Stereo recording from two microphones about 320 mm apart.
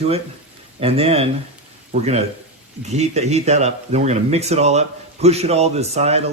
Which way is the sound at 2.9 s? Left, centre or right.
Right.